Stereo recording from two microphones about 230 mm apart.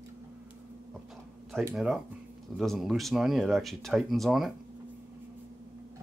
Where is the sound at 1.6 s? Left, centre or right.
Centre.